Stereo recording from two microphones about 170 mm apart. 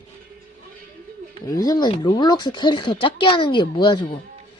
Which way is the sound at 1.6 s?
25° left (ahead or behind).